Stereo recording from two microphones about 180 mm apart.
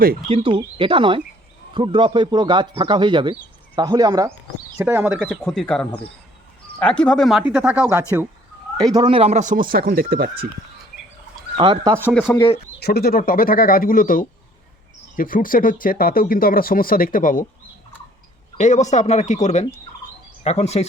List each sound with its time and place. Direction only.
0.3 s a man's voice: 30° right (ahead or behind); by 8.0 s 10° right (ahead or behind)
8.8 s speech: 25° right (ahead or behind); by 10.2 s 55° right (ahead or behind)
11.5 s a man's voice: 25° right (ahead or behind)
12.8 s speech: 60° left (ahead or behind)
18.5 s speech: 40° left (ahead or behind)